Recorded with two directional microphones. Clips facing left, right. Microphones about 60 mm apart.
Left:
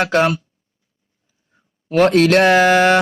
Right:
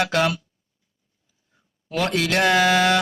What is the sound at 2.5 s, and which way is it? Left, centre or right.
Mantra, left.